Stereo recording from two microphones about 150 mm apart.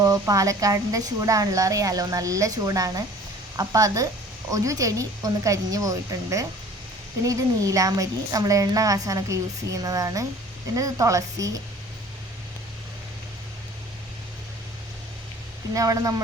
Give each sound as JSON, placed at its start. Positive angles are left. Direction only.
{"t": 0.0, "sound": "a woman's voice", "side_deg": -25}
{"t": 15.7, "sound": "a woman's voice", "side_deg": -25}